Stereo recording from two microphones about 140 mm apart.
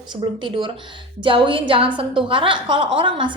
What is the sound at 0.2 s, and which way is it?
A woman's voice, 35° right (ahead or behind).